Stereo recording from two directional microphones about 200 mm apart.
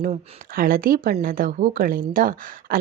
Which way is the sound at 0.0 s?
45° right (ahead or behind).